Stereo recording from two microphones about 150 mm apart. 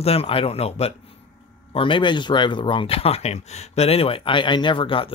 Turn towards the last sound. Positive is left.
turn(degrees=35)  # may be behind; listen again after turning